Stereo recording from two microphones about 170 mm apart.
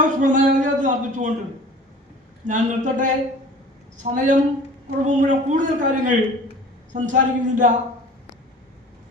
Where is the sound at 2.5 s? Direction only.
45° right (ahead or behind).